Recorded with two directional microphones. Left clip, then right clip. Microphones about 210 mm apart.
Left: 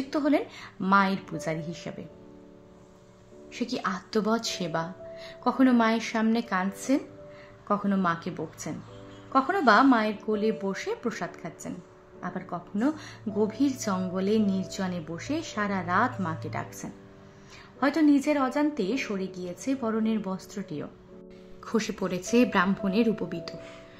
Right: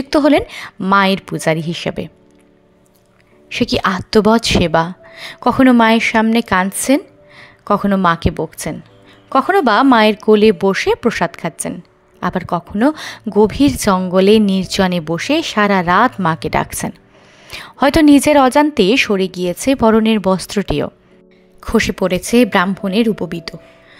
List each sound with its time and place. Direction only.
0.1 s speech: 45° right (ahead or behind)
3.4 s speech: 45° right (ahead or behind)